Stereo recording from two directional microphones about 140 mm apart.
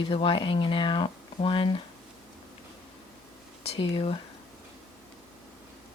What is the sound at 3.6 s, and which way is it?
Speech, 45° left (ahead or behind).